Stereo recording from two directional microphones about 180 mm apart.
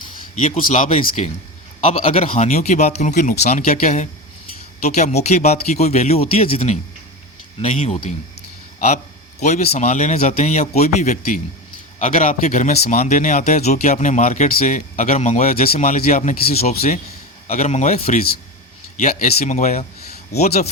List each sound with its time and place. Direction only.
0.6 s speech: 50° left (ahead or behind)
1.8 s speech: 35° left (ahead or behind)
9.4 s speech: 40° left (ahead or behind)
16.5 s speech: 35° left (ahead or behind)